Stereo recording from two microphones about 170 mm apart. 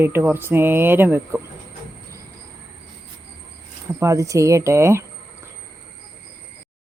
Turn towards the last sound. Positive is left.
turn(degrees=-15)  # may be behind; listen again after turning